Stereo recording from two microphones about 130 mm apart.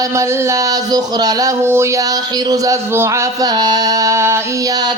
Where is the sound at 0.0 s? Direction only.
25° right (ahead or behind).